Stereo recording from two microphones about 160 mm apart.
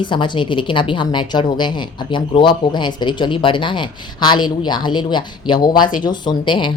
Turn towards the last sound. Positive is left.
turn(degrees=30)  # may be behind; listen again after turning